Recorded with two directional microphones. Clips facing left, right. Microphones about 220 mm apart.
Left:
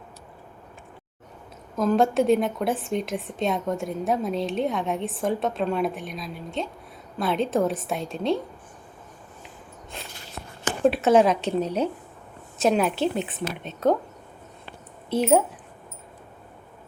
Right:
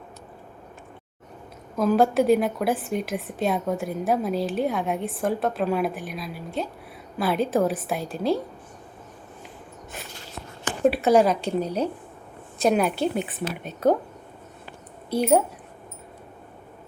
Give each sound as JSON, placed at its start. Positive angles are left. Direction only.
{"t": 1.7, "sound": "a woman's voice", "side_deg": -5}
{"t": 10.8, "sound": "a woman's voice", "side_deg": 0}
{"t": 15.1, "sound": "a woman's voice", "side_deg": 0}